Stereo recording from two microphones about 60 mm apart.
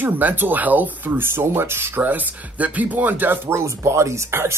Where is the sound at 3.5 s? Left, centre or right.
Right.